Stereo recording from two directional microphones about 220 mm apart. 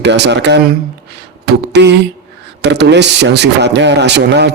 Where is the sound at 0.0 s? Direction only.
50° right (ahead or behind).